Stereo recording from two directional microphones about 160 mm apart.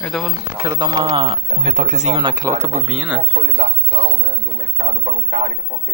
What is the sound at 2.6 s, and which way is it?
Speech, 45° right (ahead or behind).